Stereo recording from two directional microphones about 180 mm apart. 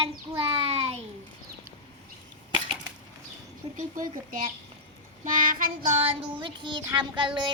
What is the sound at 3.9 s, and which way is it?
Speech, 50° right (ahead or behind).